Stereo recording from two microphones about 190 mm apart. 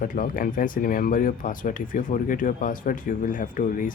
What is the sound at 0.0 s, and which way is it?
Speech, 45° left (ahead or behind).